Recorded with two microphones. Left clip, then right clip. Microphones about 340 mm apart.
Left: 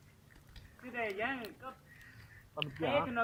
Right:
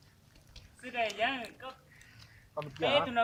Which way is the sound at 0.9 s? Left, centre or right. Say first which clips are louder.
Right 5 dB; right.